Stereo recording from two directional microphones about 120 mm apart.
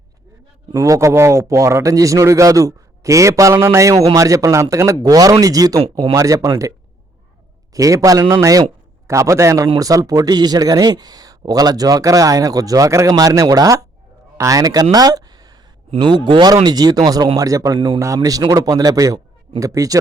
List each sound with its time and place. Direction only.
0.7 s a man's voice: 25° right (ahead or behind)
14.9 s a sound: 30° right (ahead or behind)
16.0 s a man's voice: 40° right (ahead or behind)
17.7 s a man's voice: 45° right (ahead or behind)
18.0 s a man's voice: 30° right (ahead or behind)